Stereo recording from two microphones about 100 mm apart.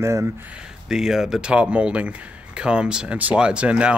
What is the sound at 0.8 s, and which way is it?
Speech, 5° right (ahead or behind).